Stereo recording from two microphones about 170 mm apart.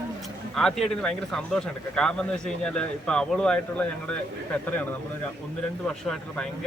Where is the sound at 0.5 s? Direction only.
5° left (ahead or behind).